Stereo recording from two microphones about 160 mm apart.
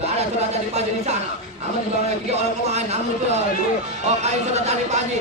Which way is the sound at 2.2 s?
45° right (ahead or behind).